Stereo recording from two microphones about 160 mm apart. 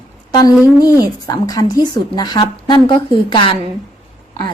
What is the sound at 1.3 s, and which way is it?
A woman's voice, 25° left (ahead or behind).